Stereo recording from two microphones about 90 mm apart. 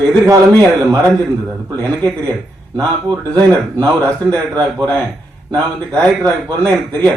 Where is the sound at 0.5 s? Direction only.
10° left (ahead or behind).